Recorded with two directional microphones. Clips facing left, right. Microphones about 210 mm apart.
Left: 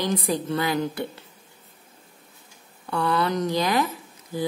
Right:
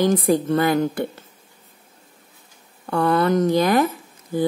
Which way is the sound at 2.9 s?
50° right (ahead or behind).